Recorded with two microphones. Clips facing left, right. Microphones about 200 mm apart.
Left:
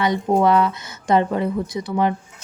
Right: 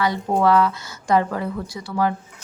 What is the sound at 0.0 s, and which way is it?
Speech, 20° left (ahead or behind).